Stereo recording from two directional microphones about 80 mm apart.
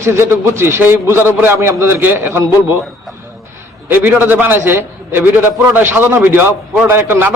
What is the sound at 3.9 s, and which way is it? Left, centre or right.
A man's voice, right.